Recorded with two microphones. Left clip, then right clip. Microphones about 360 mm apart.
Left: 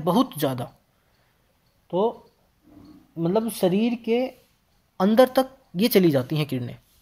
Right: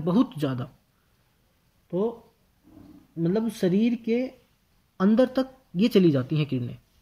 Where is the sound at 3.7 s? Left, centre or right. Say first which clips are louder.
Left 2 dB; centre.